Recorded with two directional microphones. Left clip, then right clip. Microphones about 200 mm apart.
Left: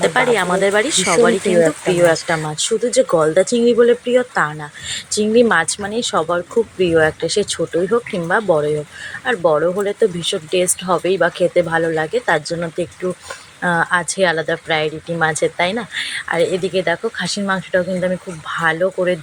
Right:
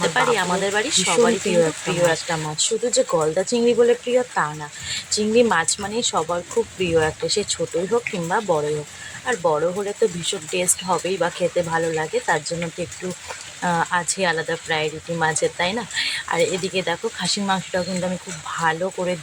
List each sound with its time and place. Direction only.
0.0 s speech: 20° left (ahead or behind)
13.6 s speech: 10° left (ahead or behind)